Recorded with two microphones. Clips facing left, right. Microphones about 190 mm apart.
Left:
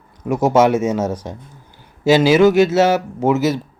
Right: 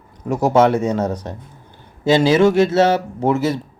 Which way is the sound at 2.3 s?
30° right (ahead or behind).